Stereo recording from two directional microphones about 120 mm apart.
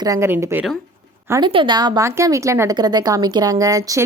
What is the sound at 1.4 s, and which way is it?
Speech, 40° right (ahead or behind).